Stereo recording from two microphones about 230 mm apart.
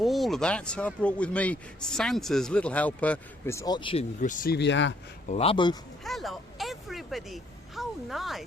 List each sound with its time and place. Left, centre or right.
0.0 s speech: centre; by 4.0 s left
4.2 s speech: left
5.3 s speech: left
6.0 s speech: centre